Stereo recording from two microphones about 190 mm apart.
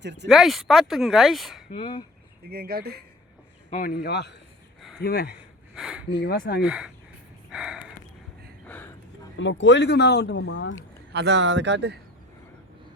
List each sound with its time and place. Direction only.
0.0 s speech: 65° right (ahead or behind)
0.3 s speech: centre (ahead or behind)
1.7 s speech: 25° left (ahead or behind)
2.5 s speech: 55° right (ahead or behind)
3.7 s speech: 45° left (ahead or behind); by 4.4 s 60° left (ahead or behind)
4.8 s a sound: centre (ahead or behind)
5.0 s speech: 55° left (ahead or behind)
5.7 s a sound: 5° right (ahead or behind)
6.1 s speech: 55° left (ahead or behind)
6.6 s speech: 5° right (ahead or behind)
7.5 s a sound: 5° right (ahead or behind)
8.6 s a sound: 10° left (ahead or behind)
9.4 s speech: 75° left (ahead or behind)
11.1 s speech: 65° right (ahead or behind)